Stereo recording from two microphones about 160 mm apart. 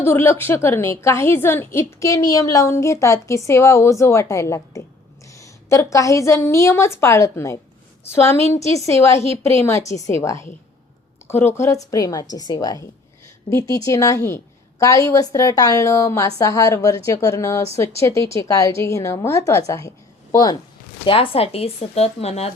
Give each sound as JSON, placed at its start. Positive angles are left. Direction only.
{"t": 0.0, "sound": "a woman's voice", "side_deg": 15}
{"t": 21.0, "sound": "speech", "side_deg": 35}